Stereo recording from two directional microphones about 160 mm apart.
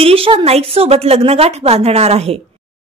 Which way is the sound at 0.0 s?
35° right (ahead or behind).